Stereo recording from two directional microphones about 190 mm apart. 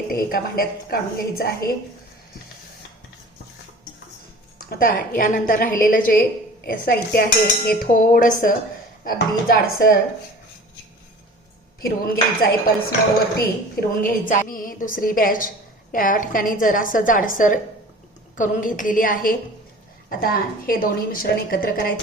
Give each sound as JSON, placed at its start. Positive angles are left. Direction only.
{"t": 0.1, "sound": "a woman's voice", "side_deg": 50}
{"t": 4.5, "sound": "a woman's voice", "side_deg": 50}
{"t": 11.8, "sound": "a woman's voice", "side_deg": 50}